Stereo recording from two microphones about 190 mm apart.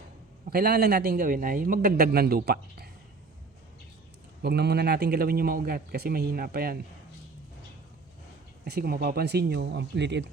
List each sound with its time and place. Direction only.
0.5 s a man's voice: 55° right (ahead or behind)
4.4 s a man's voice: 60° right (ahead or behind)
8.6 s speech: 55° right (ahead or behind)